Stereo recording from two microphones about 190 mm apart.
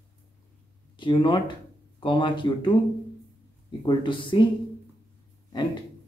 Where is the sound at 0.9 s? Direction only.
25° left (ahead or behind).